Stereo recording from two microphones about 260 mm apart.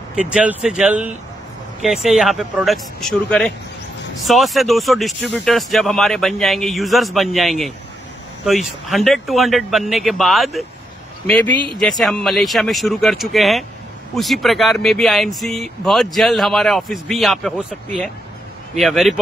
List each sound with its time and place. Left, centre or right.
0.1 s speech: centre
11.5 s speech: centre
11.8 s speech: centre